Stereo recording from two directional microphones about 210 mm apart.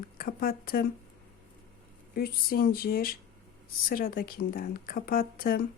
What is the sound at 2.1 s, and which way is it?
Speech, 45° left (ahead or behind).